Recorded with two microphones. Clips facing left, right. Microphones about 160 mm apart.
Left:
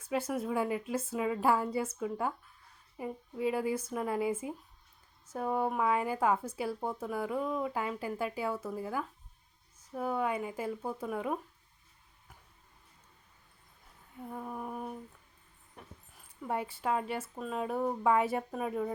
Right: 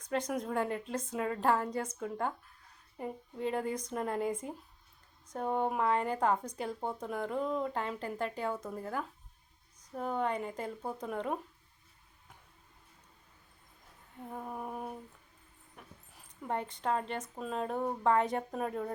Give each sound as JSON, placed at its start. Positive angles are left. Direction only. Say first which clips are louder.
{"t": 0.0, "sound": "speech", "louder": "left 1 dB", "side_deg": 5}
{"t": 14.3, "sound": "speech", "louder": "left 1 dB", "side_deg": -5}
{"t": 15.7, "sound": "dog", "louder": "left 2 dB", "side_deg": 5}
{"t": 17.3, "sound": "speech", "louder": "even", "side_deg": 0}